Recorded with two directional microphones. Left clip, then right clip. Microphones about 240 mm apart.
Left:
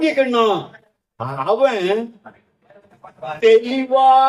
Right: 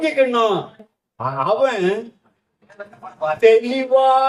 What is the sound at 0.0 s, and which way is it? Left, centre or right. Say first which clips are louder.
A man's voice: left 1 dB; left.